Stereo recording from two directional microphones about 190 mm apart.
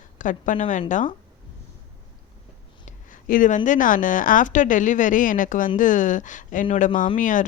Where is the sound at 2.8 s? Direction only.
45° left (ahead or behind).